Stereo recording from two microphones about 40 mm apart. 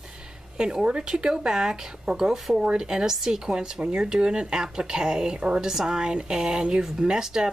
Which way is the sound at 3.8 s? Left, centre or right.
Right.